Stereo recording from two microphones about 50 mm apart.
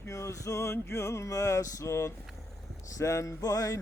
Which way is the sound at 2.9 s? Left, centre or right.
Left.